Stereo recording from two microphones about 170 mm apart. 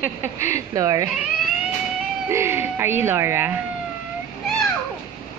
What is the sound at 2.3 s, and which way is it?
Speech, 15° right (ahead or behind).